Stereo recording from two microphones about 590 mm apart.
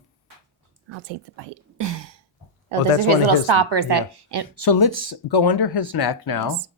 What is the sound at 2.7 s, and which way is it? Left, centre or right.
Speech, right.